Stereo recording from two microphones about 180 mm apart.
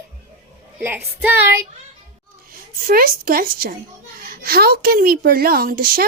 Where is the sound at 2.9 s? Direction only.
55° right (ahead or behind).